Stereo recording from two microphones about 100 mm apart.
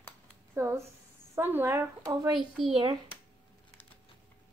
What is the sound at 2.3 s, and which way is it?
Speech, centre (ahead or behind).